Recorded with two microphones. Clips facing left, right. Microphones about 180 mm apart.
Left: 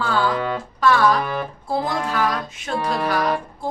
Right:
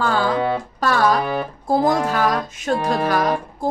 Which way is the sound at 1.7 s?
45° right (ahead or behind).